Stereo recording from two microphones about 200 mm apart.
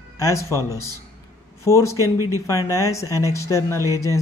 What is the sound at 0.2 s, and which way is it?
Speech, 15° left (ahead or behind).